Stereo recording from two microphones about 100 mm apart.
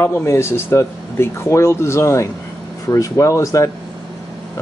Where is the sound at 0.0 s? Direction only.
25° left (ahead or behind).